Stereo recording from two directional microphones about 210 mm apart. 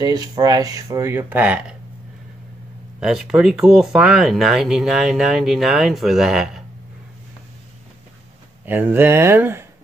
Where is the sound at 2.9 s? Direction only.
5° right (ahead or behind).